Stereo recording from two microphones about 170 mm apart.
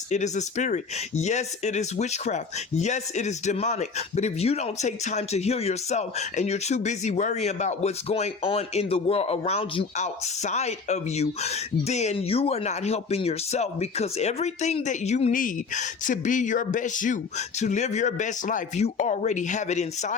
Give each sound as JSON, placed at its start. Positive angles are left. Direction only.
{"t": 0.1, "sound": "speech", "side_deg": 45}